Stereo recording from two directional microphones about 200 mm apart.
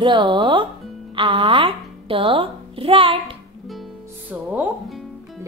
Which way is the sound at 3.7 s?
Centre (ahead or behind).